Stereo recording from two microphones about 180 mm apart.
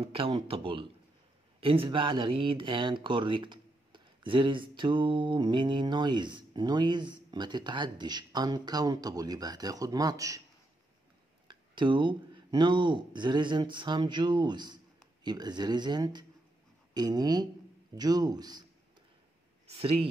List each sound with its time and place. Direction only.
0.0 s speech: 30° right (ahead or behind)
11.4 s speech: 25° right (ahead or behind)
19.7 s speech: 30° right (ahead or behind)